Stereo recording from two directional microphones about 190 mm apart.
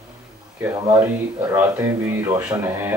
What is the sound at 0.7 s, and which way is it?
Speech, 20° right (ahead or behind).